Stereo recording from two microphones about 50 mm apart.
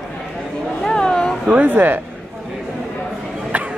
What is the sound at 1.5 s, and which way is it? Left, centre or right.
Speech, right.